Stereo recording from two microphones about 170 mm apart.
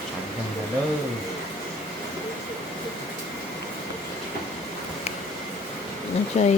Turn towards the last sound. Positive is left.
turn(degrees=45)  # may be behind; listen again after turning